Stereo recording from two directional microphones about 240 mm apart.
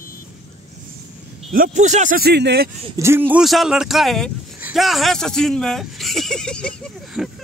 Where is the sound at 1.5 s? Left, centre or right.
Right.